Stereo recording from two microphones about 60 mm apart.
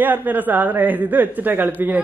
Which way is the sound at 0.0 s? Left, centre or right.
Right.